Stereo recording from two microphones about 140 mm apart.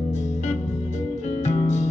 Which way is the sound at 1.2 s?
55° left (ahead or behind).